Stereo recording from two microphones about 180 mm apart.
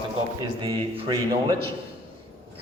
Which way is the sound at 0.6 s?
25° right (ahead or behind).